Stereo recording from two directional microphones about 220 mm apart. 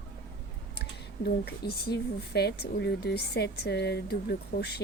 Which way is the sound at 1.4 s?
45° left (ahead or behind).